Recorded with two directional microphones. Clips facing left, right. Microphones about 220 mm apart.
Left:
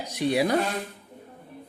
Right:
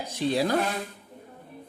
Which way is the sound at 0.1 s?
15° left (ahead or behind).